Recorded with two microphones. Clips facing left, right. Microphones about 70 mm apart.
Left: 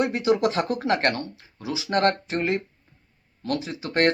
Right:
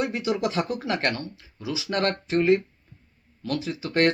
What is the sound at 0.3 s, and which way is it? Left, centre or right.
Speech, left.